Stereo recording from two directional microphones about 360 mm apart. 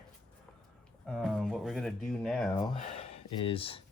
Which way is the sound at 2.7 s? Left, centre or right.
Centre.